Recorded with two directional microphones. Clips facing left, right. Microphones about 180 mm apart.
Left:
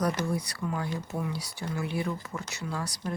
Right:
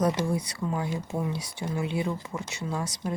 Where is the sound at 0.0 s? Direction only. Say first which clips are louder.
Right 3 dB; 25° right (ahead or behind).